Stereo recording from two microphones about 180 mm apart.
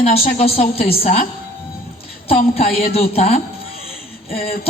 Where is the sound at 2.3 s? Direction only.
35° left (ahead or behind).